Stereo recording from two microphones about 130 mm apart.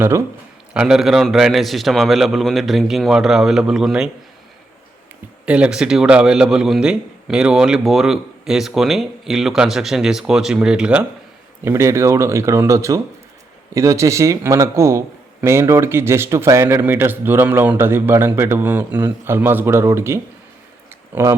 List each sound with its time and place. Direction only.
0.7 s a man's voice: 5° right (ahead or behind)
5.5 s a man's voice: 10° right (ahead or behind)
11.6 s a man's voice: 20° right (ahead or behind)